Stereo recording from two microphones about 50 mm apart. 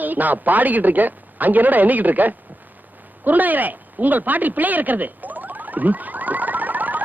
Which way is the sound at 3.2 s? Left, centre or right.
Right.